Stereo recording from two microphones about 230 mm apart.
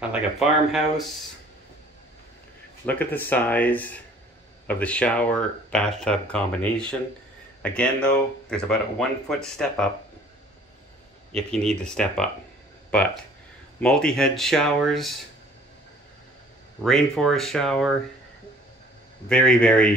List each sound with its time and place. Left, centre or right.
0.1 s speech: centre
2.8 s speech: centre
11.3 s speech: centre
16.8 s speech: centre
19.2 s speech: centre